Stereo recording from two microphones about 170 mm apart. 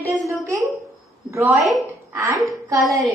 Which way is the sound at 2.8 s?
Centre (ahead or behind).